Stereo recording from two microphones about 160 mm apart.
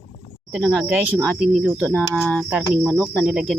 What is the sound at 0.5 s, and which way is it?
Speech, 5° right (ahead or behind).